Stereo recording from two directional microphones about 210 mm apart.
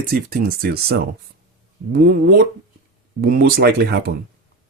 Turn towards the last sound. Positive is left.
turn(degrees=-50)  # may be behind; listen again after turning